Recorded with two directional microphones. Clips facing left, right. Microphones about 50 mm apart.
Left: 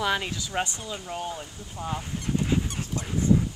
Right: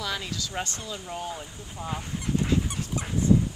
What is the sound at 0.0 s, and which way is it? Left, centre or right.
Speech, left.